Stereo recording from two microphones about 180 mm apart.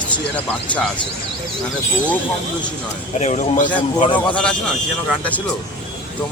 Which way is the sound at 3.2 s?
45° left (ahead or behind).